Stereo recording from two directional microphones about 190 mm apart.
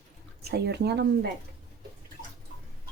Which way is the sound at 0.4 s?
60° right (ahead or behind).